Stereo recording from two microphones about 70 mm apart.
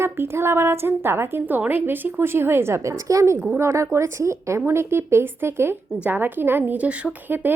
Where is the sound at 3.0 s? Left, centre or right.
Right; by 7.3 s centre.